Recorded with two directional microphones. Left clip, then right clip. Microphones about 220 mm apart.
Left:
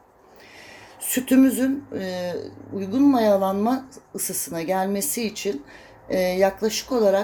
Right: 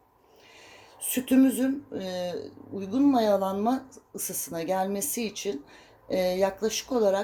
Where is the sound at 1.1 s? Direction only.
Centre (ahead or behind).